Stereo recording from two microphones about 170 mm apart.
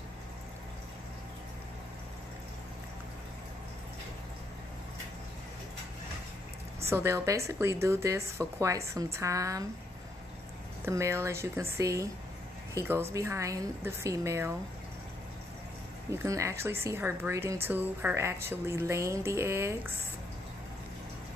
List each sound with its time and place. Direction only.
6.9 s speech: 15° right (ahead or behind)
10.9 s speech: 15° right (ahead or behind)
16.1 s speech: 15° right (ahead or behind)